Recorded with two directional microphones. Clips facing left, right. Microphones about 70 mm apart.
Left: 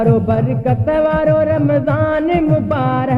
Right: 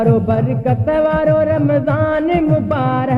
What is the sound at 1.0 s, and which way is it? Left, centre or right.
Music, centre.